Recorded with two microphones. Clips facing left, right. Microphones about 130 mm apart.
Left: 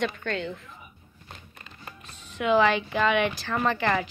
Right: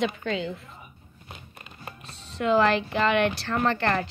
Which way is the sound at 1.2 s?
20° right (ahead or behind).